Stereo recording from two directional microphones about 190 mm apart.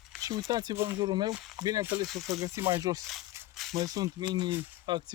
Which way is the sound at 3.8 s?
20° right (ahead or behind).